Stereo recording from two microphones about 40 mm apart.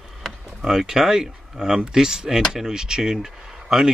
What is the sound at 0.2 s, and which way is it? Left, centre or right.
Speech, centre.